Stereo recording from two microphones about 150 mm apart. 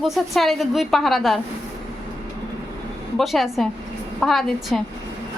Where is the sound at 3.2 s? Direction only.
Centre (ahead or behind).